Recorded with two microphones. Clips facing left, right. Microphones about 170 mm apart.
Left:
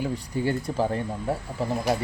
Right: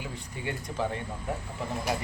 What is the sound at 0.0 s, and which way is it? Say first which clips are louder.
Speech: left 10 dB; 35° left (ahead or behind).